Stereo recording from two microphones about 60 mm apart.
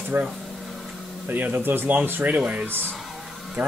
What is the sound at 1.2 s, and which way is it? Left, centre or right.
Speech, right.